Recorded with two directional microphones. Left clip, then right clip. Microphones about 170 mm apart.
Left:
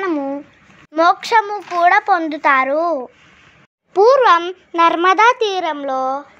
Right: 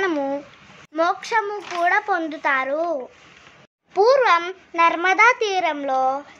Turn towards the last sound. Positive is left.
turn(degrees=20)  # may be behind; listen again after turning